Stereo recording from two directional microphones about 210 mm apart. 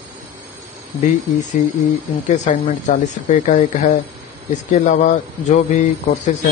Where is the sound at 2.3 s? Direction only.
35° left (ahead or behind).